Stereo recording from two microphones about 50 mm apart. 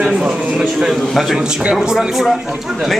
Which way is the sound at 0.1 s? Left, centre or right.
Centre.